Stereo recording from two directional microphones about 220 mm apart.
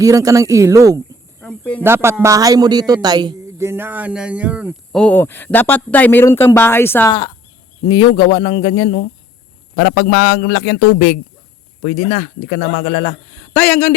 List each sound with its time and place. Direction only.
0.0 s speech: 15° right (ahead or behind)
1.4 s snake: 5° left (ahead or behind)
1.8 s a man's voice: 10° right (ahead or behind); by 9.0 s 20° left (ahead or behind)
9.7 s a man's voice: 40° left (ahead or behind)
12.5 s a man's voice: 50° left (ahead or behind)
12.8 s speech: 25° left (ahead or behind)
13.3 s a man's voice: 5° left (ahead or behind)